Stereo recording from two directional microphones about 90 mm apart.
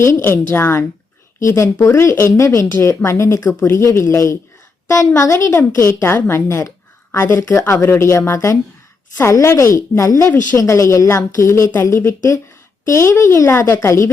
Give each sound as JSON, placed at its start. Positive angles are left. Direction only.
{"t": 0.0, "sound": "a woman's voice", "side_deg": 30}